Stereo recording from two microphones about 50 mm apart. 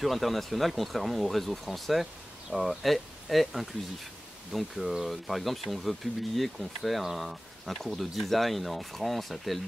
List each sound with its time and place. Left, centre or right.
0.0 s speech: centre